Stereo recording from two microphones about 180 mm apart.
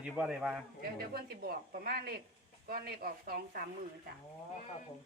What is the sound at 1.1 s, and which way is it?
Speech, 60° right (ahead or behind).